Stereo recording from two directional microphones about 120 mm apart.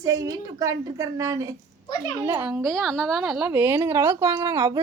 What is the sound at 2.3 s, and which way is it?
Speech, 15° right (ahead or behind).